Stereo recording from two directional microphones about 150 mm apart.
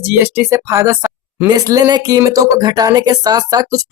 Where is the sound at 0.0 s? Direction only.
15° right (ahead or behind).